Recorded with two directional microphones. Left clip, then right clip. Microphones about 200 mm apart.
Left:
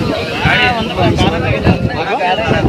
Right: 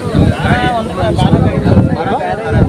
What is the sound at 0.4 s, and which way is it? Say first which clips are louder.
Vehicle: left 5 dB; 50° right (ahead or behind).